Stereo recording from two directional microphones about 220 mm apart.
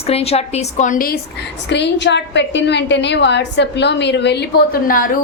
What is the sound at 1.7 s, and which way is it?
A woman's voice, 55° left (ahead or behind).